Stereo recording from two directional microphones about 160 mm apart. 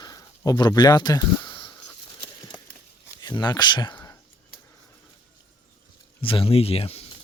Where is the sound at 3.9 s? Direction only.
15° left (ahead or behind).